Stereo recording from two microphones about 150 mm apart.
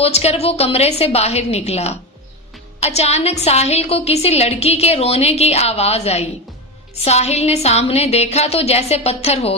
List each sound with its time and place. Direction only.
0.0 s a woman's voice: 45° left (ahead or behind)